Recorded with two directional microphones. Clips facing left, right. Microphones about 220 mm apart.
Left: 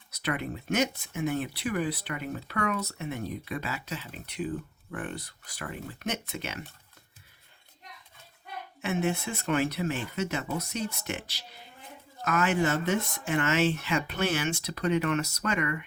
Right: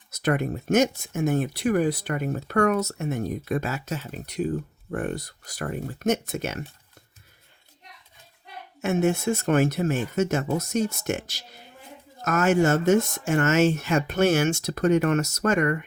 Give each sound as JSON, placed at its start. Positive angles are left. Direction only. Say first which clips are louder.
{"t": 0.1, "sound": "speech", "louder": "right 7 dB", "side_deg": -45}
{"t": 8.8, "sound": "speech", "louder": "right 6 dB", "side_deg": -45}